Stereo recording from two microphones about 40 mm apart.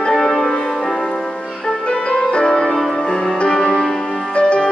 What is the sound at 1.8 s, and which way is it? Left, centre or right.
Music, left.